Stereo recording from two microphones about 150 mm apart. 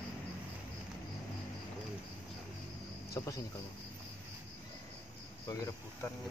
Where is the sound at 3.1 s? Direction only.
20° left (ahead or behind).